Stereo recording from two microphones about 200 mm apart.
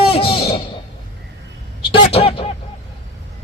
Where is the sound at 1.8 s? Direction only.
30° left (ahead or behind).